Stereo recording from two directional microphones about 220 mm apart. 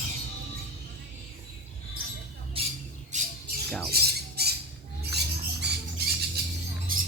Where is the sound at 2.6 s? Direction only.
25° right (ahead or behind).